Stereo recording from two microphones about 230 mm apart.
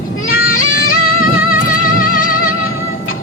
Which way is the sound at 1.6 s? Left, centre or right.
Left.